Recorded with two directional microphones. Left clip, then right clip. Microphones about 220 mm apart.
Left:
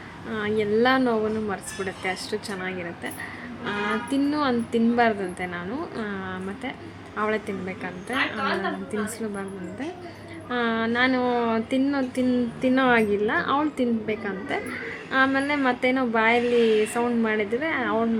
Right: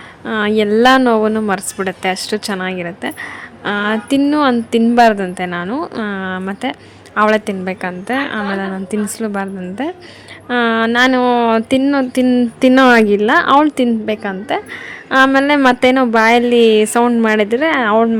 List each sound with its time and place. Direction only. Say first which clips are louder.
0.3 s a woman's voice: right 10 dB; 45° right (ahead or behind)